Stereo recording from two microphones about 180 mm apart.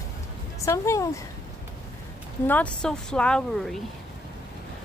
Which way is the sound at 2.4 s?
10° left (ahead or behind).